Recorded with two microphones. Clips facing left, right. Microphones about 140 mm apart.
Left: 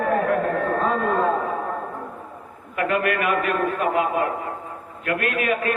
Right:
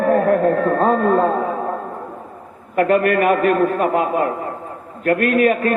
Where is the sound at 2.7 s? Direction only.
45° right (ahead or behind).